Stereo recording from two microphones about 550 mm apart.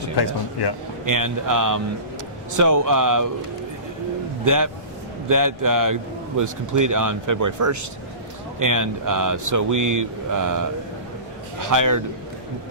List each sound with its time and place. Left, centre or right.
0.2 s speech: left
1.0 s a man's voice: right
4.4 s a man's voice: right